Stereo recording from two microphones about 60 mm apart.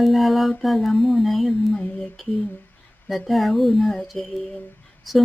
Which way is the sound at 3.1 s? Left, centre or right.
Centre.